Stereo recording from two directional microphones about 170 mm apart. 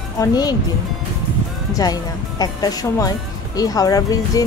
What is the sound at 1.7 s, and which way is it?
Speech, 20° left (ahead or behind).